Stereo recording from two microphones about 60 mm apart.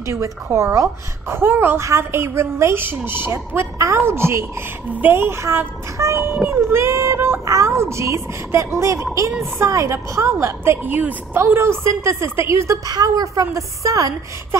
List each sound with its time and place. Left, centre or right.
0.1 s a woman's voice: right
1.3 s a woman's voice: right
1.8 s a woman's voice: right
3.7 s a sound: right
4.0 s a woman's voice: right
6.3 s a woman's voice: right
7.4 s a woman's voice: right
10.4 s a woman's voice: right
10.9 s a woman's voice: right
11.4 s a woman's voice: right
12.6 s a woman's voice: right